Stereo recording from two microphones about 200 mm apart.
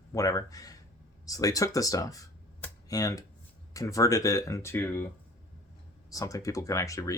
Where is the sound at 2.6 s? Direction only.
15° left (ahead or behind).